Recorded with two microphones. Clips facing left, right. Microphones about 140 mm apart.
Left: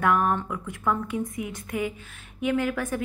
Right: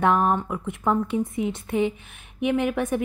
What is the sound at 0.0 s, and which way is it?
A woman's voice, 25° right (ahead or behind).